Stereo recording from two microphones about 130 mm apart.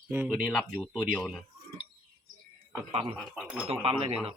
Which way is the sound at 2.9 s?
45° right (ahead or behind).